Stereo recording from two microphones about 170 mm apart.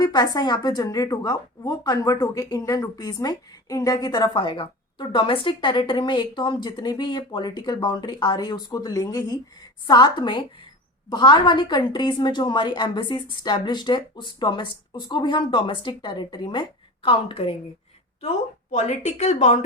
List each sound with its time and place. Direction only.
0.0 s a woman's voice: 25° left (ahead or behind)
18.7 s speech: 45° left (ahead or behind)